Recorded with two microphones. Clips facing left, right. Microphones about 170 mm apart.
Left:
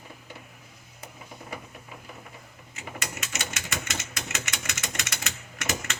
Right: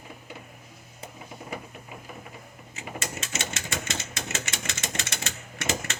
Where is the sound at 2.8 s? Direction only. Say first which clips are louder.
Right 2 dB; 30° right (ahead or behind).